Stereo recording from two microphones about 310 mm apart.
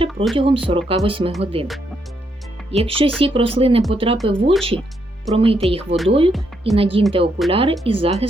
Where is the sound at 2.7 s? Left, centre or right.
Centre.